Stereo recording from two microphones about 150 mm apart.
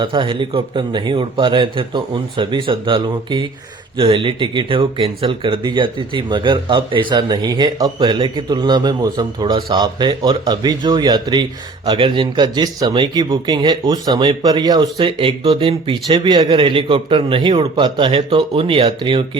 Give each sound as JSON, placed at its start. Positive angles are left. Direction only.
{"t": 0.0, "sound": "speech", "side_deg": -35}